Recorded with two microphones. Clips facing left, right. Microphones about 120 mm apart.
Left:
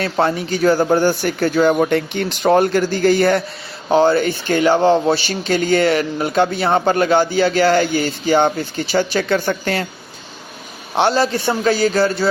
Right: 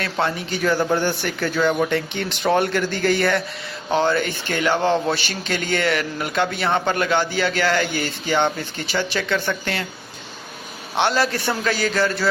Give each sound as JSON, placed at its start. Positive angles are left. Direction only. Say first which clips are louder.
{"t": 0.0, "sound": "speech", "louder": "left 6 dB", "side_deg": 40}
{"t": 10.9, "sound": "speech", "louder": "left 4 dB", "side_deg": 35}